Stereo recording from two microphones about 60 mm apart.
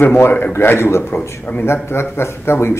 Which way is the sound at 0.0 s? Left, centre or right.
Left.